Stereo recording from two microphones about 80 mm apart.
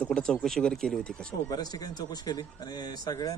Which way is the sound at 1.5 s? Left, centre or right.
Left.